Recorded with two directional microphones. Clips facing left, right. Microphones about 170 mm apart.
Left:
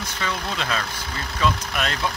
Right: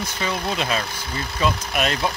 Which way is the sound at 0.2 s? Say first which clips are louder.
Right 3 dB; 20° right (ahead or behind).